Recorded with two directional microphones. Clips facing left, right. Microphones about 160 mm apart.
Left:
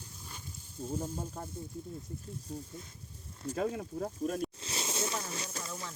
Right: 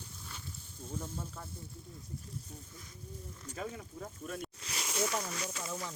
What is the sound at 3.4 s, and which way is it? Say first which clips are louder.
Speech: left 9 dB; 45° left (ahead or behind).